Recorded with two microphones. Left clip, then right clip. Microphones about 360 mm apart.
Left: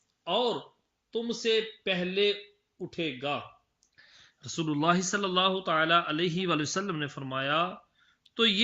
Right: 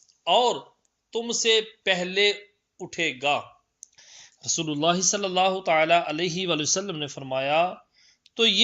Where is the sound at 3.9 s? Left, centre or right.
Centre.